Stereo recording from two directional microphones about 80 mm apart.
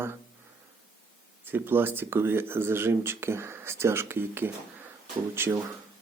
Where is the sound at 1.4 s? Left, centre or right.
Right.